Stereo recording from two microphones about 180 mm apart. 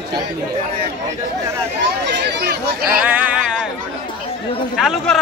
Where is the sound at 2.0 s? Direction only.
75° right (ahead or behind).